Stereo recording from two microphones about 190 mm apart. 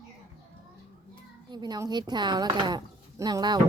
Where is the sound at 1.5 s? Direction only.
20° right (ahead or behind).